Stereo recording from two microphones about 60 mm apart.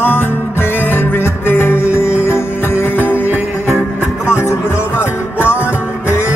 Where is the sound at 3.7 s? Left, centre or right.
Centre.